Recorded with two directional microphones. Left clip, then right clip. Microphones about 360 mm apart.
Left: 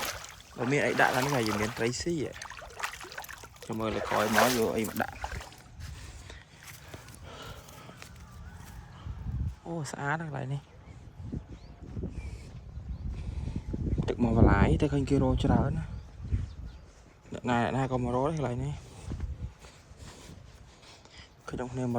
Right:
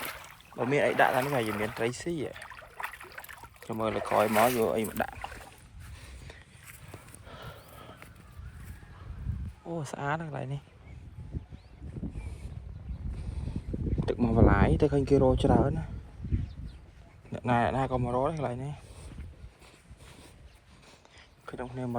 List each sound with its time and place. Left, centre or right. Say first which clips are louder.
0.5 s speech: right 2 dB; centre
7.3 s horse: left 1 dB; centre
9.6 s speech: even; centre
13.1 s a sound: even; centre
17.3 s speech: right 2 dB; centre
21.4 s speech: left 2 dB; centre